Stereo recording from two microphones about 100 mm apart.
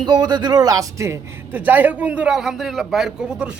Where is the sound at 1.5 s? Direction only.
15° right (ahead or behind).